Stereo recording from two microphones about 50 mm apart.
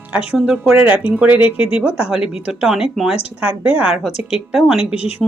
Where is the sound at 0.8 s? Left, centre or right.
Right; by 2.9 s centre.